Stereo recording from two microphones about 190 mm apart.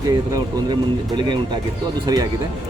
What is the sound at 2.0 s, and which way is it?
Speech, 20° right (ahead or behind).